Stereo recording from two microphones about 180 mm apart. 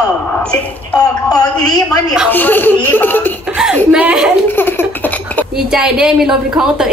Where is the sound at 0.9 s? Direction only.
20° left (ahead or behind).